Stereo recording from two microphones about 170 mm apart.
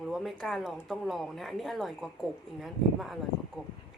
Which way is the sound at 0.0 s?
Centre (ahead or behind).